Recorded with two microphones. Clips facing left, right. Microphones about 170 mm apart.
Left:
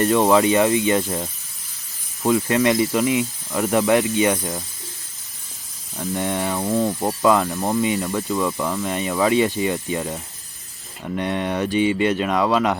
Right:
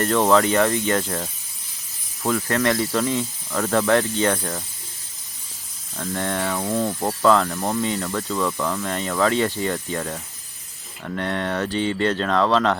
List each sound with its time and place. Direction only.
0.0 s speech: 15° left (ahead or behind)
6.0 s speech: 15° left (ahead or behind)